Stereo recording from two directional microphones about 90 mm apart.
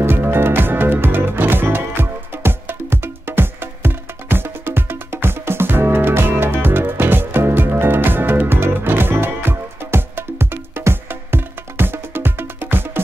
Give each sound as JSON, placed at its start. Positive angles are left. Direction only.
{"t": 0.0, "sound": "music", "side_deg": -25}